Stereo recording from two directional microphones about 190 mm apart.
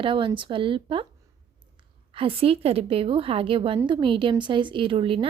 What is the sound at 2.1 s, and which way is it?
A woman's voice, 30° right (ahead or behind).